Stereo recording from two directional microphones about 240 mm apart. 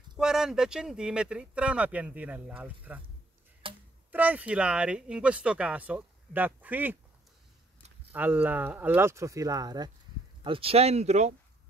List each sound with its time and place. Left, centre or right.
0.2 s speech: centre
3.6 s a sound: right
4.1 s speech: centre
8.1 s speech: centre; by 11.3 s right